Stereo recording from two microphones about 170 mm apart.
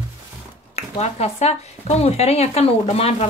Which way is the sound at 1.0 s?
40° left (ahead or behind).